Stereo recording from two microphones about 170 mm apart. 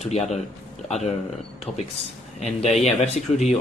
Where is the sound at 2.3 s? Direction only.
40° left (ahead or behind).